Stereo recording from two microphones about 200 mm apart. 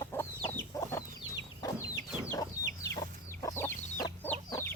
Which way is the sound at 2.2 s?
15° left (ahead or behind).